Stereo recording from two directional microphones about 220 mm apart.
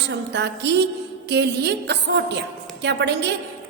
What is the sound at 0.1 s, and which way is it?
A woman's voice, 50° right (ahead or behind).